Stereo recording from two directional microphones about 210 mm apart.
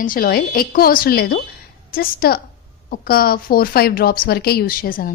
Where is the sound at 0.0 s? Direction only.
40° left (ahead or behind).